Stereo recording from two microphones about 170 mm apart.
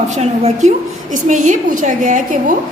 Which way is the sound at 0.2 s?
40° right (ahead or behind).